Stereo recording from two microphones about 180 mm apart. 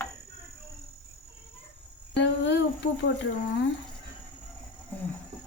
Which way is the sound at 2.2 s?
75° left (ahead or behind).